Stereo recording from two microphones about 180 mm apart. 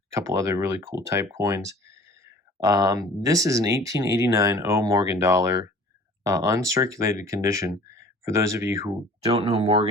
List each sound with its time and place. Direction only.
0.1 s speech: 15° right (ahead or behind)
9.2 s speech: 35° right (ahead or behind)